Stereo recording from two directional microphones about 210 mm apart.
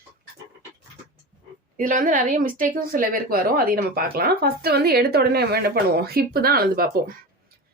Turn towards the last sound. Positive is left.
turn(degrees=-40)  # may be behind; listen again after turning